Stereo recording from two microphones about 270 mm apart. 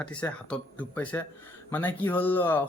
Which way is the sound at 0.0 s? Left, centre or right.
Centre.